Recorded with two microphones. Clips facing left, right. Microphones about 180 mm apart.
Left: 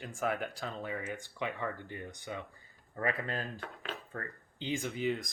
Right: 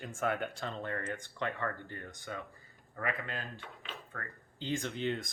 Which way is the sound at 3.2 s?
40° left (ahead or behind).